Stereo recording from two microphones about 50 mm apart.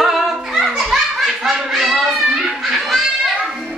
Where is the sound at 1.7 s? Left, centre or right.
Centre.